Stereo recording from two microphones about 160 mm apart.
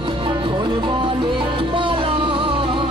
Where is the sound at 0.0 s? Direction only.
35° right (ahead or behind).